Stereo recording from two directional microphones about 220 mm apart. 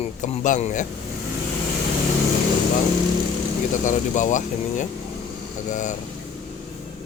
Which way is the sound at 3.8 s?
35° left (ahead or behind).